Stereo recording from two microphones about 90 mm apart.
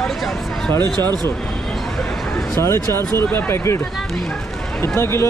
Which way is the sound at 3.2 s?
25° left (ahead or behind).